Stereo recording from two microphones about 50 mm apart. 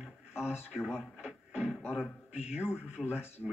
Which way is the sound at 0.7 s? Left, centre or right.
Centre.